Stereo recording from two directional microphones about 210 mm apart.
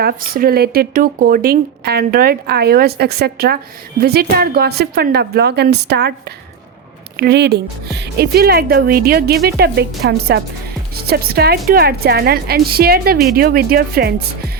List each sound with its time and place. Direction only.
0.0 s speech: 45° right (ahead or behind)